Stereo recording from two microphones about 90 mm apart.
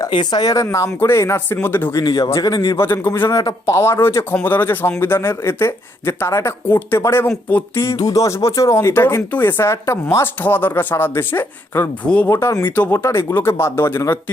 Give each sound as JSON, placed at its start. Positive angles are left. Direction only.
{"t": 0.1, "sound": "speech", "side_deg": 55}
{"t": 0.5, "sound": "speech", "side_deg": 35}
{"t": 2.0, "sound": "speech", "side_deg": 55}
{"t": 2.3, "sound": "speech", "side_deg": 40}
{"t": 2.7, "sound": "speech", "side_deg": 25}
{"t": 3.2, "sound": "speech", "side_deg": 40}
{"t": 3.8, "sound": "speech", "side_deg": 30}
{"t": 7.9, "sound": "speech", "side_deg": 40}
{"t": 12.0, "sound": "speech", "side_deg": 15}
{"t": 12.3, "sound": "speech", "side_deg": 30}